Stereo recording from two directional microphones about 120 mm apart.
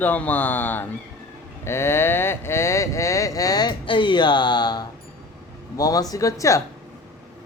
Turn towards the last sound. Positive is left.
turn(degrees=25)  # may be behind; listen again after turning